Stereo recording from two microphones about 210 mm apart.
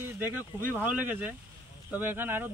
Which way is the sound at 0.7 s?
5° right (ahead or behind).